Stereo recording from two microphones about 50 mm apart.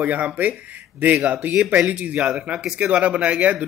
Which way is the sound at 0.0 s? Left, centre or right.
Right.